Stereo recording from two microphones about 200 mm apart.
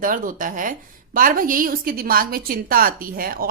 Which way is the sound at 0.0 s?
45° right (ahead or behind).